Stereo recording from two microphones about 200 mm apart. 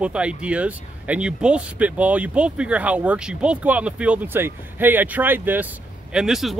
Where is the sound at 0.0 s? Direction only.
5° right (ahead or behind).